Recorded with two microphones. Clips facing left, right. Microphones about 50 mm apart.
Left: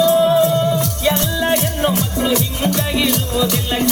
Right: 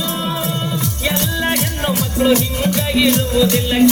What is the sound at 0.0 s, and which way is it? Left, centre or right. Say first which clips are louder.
Music: left 10 dB; centre.